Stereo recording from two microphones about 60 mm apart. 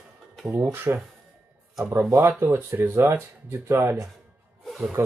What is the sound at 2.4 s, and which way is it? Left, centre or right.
Speech, right.